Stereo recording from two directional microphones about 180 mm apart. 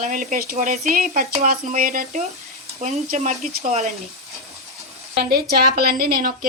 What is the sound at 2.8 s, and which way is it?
Speech, 40° right (ahead or behind).